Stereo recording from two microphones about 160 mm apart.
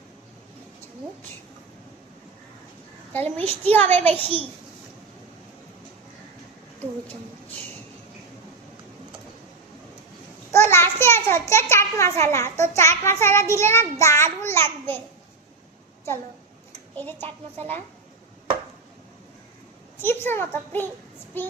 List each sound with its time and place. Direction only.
3.1 s a child's voice: 10° left (ahead or behind)
10.5 s a sound: 15° left (ahead or behind)
12.2 s a child's voice: 15° left (ahead or behind)
16.9 s a child's voice: 10° left (ahead or behind)
20.0 s a child's voice: 15° left (ahead or behind)